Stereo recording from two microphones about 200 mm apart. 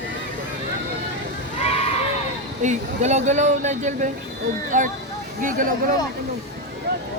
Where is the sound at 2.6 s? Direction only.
35° right (ahead or behind).